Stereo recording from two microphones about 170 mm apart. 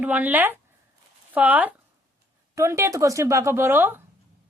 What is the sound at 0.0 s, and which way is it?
A woman's voice, 10° right (ahead or behind).